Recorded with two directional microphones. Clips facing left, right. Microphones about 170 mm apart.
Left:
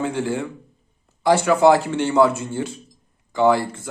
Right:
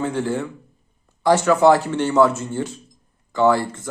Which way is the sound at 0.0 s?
15° left (ahead or behind).